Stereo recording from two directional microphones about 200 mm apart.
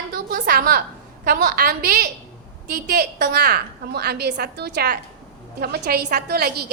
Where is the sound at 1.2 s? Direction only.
45° right (ahead or behind).